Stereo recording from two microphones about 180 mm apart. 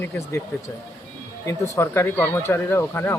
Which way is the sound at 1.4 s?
15° left (ahead or behind).